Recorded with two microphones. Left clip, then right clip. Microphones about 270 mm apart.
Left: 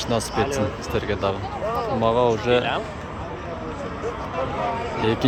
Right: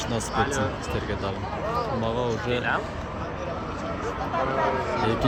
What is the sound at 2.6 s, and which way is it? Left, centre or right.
Speech, left.